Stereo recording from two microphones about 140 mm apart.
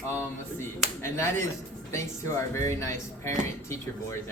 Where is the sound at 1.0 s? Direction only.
20° left (ahead or behind).